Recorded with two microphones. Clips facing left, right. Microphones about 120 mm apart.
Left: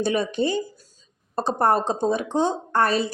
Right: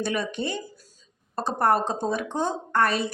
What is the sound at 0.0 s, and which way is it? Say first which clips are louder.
A woman's voice: left 5 dB; 30° left (ahead or behind).